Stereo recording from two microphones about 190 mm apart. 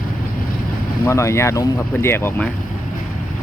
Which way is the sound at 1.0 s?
15° left (ahead or behind).